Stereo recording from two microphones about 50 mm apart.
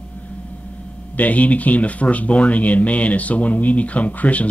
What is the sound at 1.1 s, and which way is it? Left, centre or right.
Speech, left.